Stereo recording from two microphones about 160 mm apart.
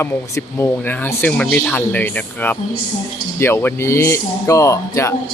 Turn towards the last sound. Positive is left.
turn(degrees=20)  # may be behind; listen again after turning